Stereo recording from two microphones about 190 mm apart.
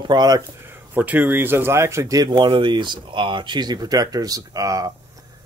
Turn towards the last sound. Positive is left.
turn(degrees=-15)  # may be behind; listen again after turning